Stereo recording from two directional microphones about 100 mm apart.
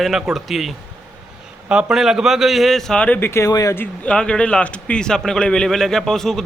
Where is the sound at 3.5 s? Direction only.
40° left (ahead or behind).